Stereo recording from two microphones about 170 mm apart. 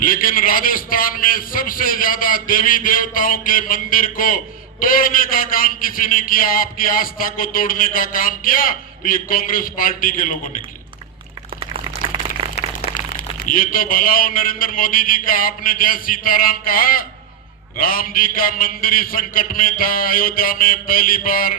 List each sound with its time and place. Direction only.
0.0 s a man's voice: 55° left (ahead or behind)
12.4 s a sound: 30° right (ahead or behind)
12.9 s a man's voice: 50° left (ahead or behind)